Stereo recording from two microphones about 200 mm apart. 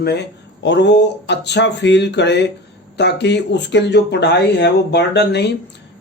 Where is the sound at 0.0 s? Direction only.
55° left (ahead or behind).